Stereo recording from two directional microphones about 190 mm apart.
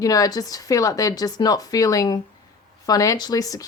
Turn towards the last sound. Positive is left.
turn(degrees=20)  # may be behind; listen again after turning